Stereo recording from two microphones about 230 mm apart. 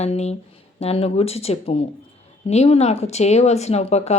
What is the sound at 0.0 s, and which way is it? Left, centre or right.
Speech, left.